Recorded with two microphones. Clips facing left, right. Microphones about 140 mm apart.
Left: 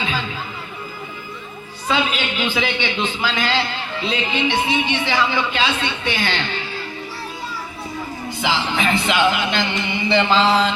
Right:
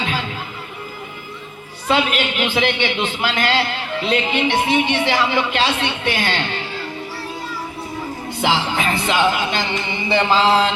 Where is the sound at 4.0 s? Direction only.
55° right (ahead or behind).